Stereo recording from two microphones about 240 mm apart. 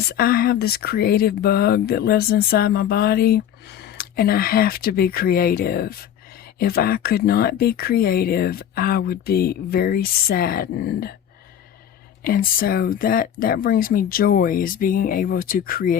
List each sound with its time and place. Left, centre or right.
0.2 s speech: left
12.2 s speech: left